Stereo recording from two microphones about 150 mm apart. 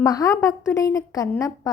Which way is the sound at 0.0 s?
25° left (ahead or behind).